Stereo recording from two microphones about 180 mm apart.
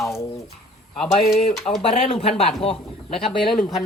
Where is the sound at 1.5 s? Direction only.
Centre (ahead or behind).